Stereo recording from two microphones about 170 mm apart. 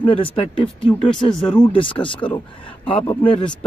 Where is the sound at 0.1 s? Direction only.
30° left (ahead or behind).